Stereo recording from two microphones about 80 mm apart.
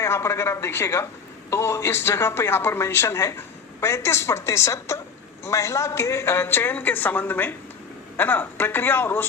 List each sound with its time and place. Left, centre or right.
0.0 s speech: left